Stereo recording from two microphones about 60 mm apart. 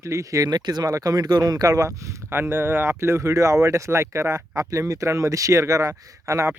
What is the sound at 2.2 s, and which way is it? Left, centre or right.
Speech, right.